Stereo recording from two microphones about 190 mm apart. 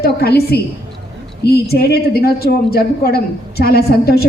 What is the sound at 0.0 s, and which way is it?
Speech, 55° left (ahead or behind).